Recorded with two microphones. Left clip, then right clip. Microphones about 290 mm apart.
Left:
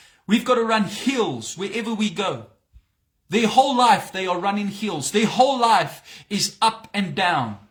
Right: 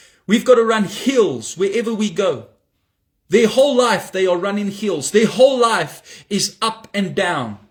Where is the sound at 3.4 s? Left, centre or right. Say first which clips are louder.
Right 3 dB; left.